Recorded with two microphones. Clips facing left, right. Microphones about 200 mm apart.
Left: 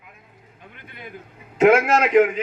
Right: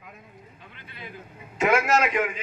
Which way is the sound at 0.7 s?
55° left (ahead or behind).